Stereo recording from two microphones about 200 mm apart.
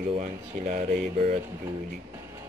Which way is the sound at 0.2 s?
40° right (ahead or behind).